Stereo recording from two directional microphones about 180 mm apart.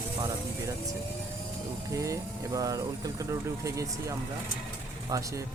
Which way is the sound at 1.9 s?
15° right (ahead or behind).